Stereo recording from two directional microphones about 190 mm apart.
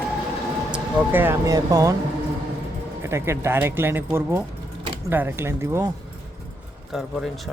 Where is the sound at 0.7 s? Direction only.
10° right (ahead or behind).